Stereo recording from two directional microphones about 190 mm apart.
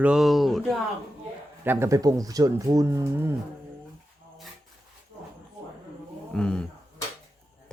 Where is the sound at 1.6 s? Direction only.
10° right (ahead or behind).